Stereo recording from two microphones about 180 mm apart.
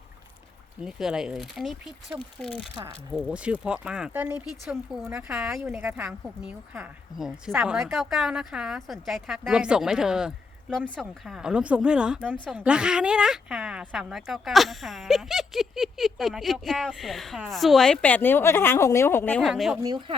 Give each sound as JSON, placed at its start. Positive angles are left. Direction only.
{"t": 0.9, "sound": "speech", "side_deg": -5}
{"t": 2.8, "sound": "speech", "side_deg": -25}
{"t": 3.2, "sound": "speech", "side_deg": -5}
{"t": 19.5, "sound": "speech", "side_deg": 0}
{"t": 19.8, "sound": "speech", "side_deg": -25}